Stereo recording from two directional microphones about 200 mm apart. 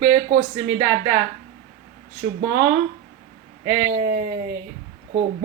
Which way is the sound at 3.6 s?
45° right (ahead or behind).